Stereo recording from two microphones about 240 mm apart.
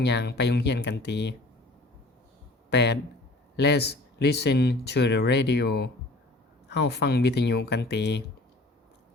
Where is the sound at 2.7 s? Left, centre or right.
Left.